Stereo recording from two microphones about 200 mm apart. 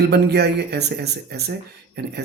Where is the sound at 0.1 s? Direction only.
55° right (ahead or behind).